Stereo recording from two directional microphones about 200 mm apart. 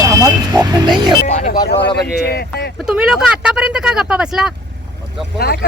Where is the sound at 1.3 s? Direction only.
35° left (ahead or behind).